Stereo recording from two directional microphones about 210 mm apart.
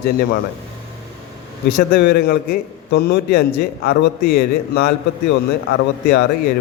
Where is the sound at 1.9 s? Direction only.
50° left (ahead or behind).